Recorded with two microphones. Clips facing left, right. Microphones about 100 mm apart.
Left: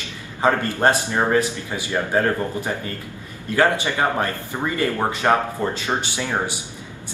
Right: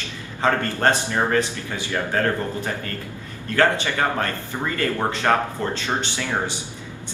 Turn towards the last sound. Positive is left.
turn(degrees=15)  # may be behind; listen again after turning